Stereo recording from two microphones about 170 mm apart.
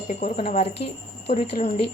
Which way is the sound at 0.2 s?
35° left (ahead or behind).